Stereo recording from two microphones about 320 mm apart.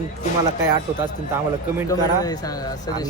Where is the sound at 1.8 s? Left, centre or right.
Centre.